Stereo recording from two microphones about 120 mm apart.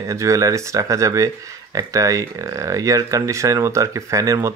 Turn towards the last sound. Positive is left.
turn(degrees=-25)  # may be behind; listen again after turning